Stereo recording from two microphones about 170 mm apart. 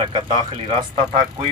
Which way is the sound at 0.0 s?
30° right (ahead or behind).